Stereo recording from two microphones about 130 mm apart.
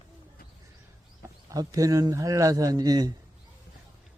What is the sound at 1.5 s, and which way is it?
A man's voice, 25° right (ahead or behind).